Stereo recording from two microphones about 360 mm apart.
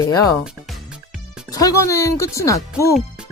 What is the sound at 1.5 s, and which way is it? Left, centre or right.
Speech, centre.